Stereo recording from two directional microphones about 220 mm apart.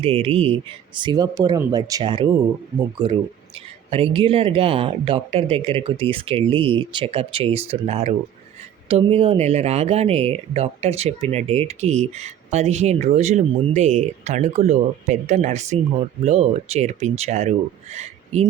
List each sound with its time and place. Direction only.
0.0 s speech: 25° right (ahead or behind)